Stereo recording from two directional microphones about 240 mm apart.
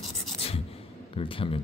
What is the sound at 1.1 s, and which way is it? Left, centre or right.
Speech, left.